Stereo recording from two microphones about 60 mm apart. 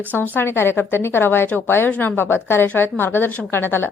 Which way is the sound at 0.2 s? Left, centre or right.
Left.